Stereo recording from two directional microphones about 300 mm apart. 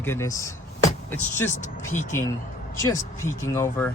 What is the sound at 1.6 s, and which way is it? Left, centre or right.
Speech, left.